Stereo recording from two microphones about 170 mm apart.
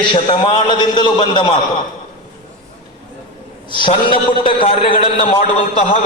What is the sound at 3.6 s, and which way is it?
A man's voice, 30° left (ahead or behind).